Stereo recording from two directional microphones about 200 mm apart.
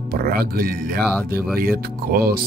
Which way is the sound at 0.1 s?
50° right (ahead or behind).